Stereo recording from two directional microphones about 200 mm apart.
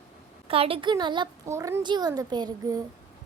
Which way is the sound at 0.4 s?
30° right (ahead or behind).